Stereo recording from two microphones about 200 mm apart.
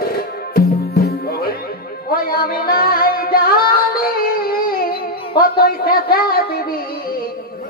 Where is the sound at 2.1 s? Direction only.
50° left (ahead or behind).